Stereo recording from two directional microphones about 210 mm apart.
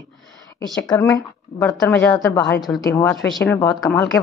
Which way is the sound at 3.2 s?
5° left (ahead or behind).